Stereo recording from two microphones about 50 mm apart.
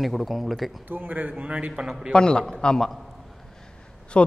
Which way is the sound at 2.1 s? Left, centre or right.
Centre.